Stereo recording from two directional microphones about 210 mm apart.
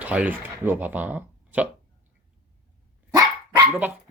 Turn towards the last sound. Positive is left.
turn(degrees=-15)  # may be behind; listen again after turning